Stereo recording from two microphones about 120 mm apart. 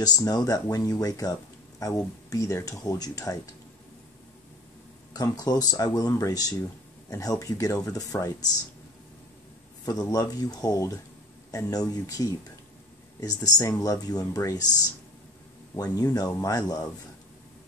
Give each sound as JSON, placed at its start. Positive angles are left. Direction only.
{"t": 0.0, "sound": "speech", "side_deg": 35}
{"t": 5.1, "sound": "speech", "side_deg": 35}
{"t": 9.8, "sound": "speech", "side_deg": 30}
{"t": 15.7, "sound": "speech", "side_deg": 30}